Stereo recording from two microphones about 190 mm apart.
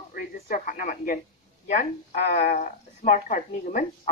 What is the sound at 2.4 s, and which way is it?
A woman's voice, 50° left (ahead or behind).